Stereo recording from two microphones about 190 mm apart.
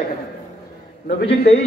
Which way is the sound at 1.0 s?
60° left (ahead or behind).